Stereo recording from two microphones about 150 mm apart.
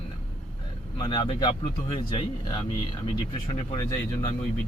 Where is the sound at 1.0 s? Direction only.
35° left (ahead or behind).